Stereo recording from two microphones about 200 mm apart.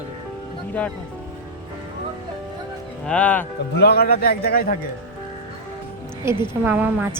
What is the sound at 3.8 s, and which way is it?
Speech, 50° left (ahead or behind).